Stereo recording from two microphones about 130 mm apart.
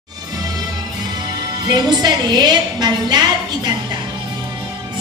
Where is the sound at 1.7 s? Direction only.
30° right (ahead or behind).